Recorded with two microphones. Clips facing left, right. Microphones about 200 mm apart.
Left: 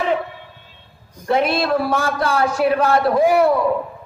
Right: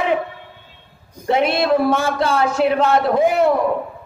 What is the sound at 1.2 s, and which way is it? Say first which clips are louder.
A man's voice: right 1 dB; 20° right (ahead or behind).